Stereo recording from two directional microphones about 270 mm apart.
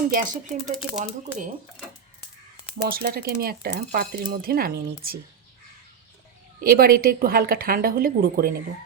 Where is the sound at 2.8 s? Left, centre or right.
Right.